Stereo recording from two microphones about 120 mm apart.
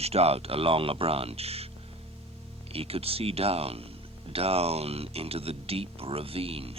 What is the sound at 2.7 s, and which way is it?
Speech, 55° right (ahead or behind).